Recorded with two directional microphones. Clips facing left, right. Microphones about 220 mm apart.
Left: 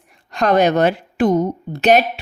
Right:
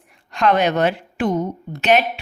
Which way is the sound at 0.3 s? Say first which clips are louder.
Left 3 dB; 40° left (ahead or behind).